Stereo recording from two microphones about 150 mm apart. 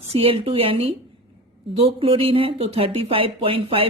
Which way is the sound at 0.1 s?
40° right (ahead or behind).